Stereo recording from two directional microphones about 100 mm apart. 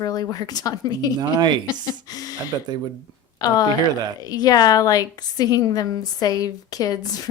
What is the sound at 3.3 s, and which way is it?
A woman's voice, 40° left (ahead or behind).